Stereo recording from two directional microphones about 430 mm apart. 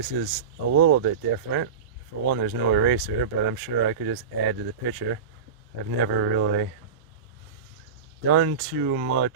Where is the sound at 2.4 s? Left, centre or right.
Right.